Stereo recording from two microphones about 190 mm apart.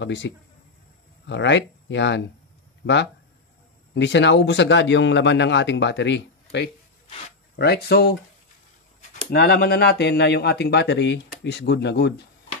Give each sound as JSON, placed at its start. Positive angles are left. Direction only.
{"t": 0.0, "sound": "speech", "side_deg": 70}
{"t": 3.9, "sound": "speech", "side_deg": 70}
{"t": 7.5, "sound": "speech", "side_deg": 55}
{"t": 9.3, "sound": "speech", "side_deg": 55}